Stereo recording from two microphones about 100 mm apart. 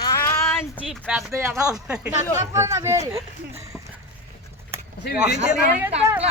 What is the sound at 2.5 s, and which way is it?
Speech, 30° right (ahead or behind).